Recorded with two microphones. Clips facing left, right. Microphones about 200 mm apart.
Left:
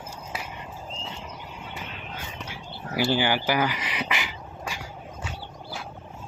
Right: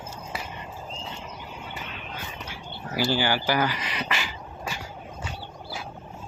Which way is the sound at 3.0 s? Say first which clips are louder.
Left 1 dB; 20° left (ahead or behind).